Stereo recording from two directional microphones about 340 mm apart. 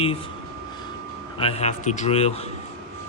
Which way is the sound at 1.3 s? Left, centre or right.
Centre.